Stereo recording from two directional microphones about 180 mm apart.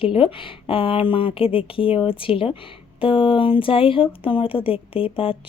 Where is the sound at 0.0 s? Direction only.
30° left (ahead or behind).